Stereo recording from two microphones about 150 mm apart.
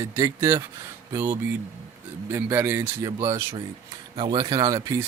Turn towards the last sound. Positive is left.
turn(degrees=-20)  # may be behind; listen again after turning